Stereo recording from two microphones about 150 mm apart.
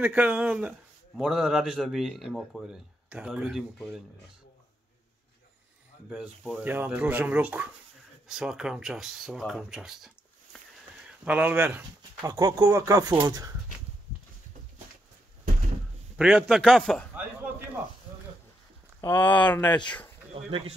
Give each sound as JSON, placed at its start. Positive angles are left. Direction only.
{"t": 0.0, "sound": "a man's voice", "side_deg": -10}
{"t": 6.0, "sound": "a man's voice", "side_deg": 0}
{"t": 6.6, "sound": "speech", "side_deg": -10}
{"t": 12.2, "sound": "speech", "side_deg": -25}
{"t": 16.2, "sound": "a man's voice", "side_deg": -5}
{"t": 18.9, "sound": "speech", "side_deg": 15}
{"t": 19.6, "sound": "speech", "side_deg": 30}
{"t": 20.3, "sound": "speech", "side_deg": -40}